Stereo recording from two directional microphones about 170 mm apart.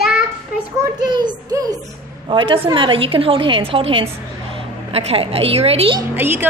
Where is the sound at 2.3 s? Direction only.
30° right (ahead or behind).